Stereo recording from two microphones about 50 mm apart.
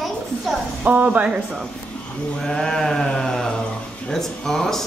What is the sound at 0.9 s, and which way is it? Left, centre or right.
Speech, right.